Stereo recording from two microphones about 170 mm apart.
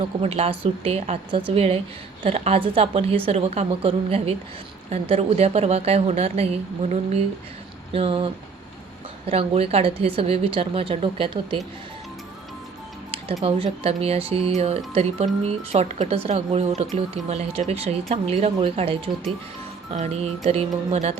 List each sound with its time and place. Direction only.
0.0 s a woman's voice: 35° right (ahead or behind)
13.4 s a woman's voice: 35° right (ahead or behind)